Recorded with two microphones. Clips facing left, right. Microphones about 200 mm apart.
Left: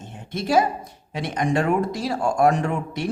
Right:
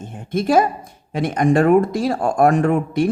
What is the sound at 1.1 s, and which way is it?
Speech, 50° right (ahead or behind).